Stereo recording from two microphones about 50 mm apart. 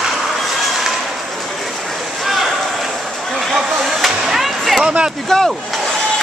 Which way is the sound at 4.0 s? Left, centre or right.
Centre.